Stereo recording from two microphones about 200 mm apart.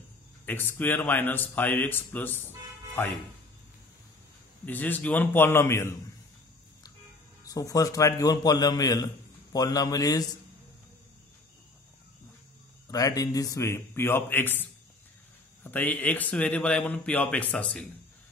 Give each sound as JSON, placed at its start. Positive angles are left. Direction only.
{"t": 0.5, "sound": "a man's voice", "side_deg": 10}
{"t": 4.6, "sound": "a man's voice", "side_deg": 10}
{"t": 7.4, "sound": "a man's voice", "side_deg": 15}
{"t": 12.9, "sound": "a man's voice", "side_deg": 15}